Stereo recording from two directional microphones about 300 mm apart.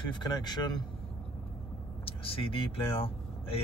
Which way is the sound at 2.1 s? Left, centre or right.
Centre.